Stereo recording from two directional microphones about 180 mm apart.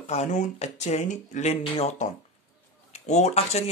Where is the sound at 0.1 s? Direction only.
40° left (ahead or behind).